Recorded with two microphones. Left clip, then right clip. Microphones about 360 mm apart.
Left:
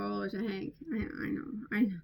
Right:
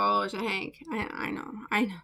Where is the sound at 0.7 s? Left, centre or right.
Right.